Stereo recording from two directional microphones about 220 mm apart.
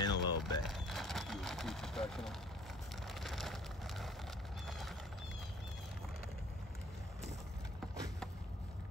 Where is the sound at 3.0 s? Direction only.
Centre (ahead or behind).